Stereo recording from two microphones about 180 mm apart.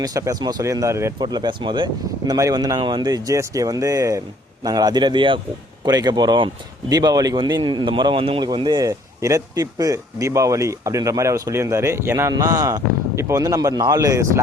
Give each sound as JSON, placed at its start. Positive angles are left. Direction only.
{"t": 0.0, "sound": "speech", "side_deg": -20}